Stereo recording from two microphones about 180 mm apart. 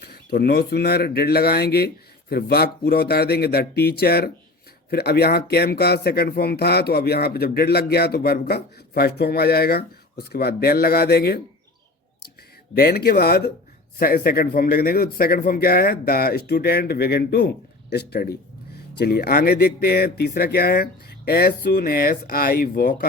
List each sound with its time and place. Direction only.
0.0 s speech: 60° left (ahead or behind)
12.7 s speech: 60° left (ahead or behind)